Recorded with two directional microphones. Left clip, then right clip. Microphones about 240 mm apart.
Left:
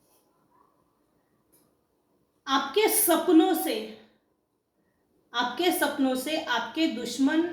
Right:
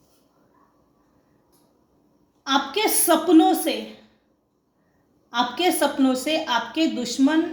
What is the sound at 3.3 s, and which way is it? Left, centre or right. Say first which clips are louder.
Speech: right 5 dB; right.